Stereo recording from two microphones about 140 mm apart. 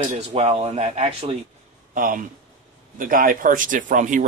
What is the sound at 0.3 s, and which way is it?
Speech, 45° right (ahead or behind).